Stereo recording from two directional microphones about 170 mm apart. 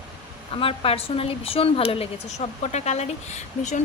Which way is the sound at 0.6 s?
35° left (ahead or behind).